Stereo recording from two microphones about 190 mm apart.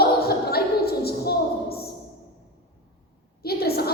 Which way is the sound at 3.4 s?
55° left (ahead or behind).